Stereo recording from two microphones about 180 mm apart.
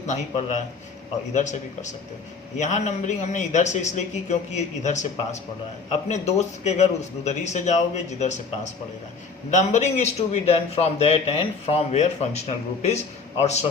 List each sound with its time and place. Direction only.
0.1 s a man's voice: 40° left (ahead or behind)